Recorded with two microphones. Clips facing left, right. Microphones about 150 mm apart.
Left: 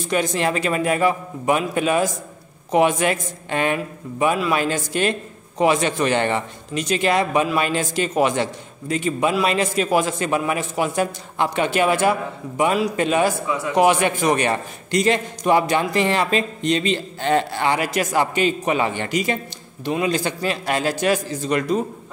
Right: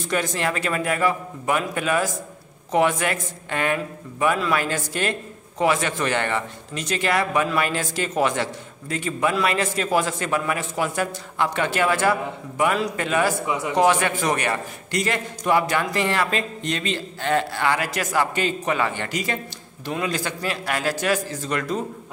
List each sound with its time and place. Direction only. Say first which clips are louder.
0.1 s a man's voice: left 3 dB; 15° left (ahead or behind)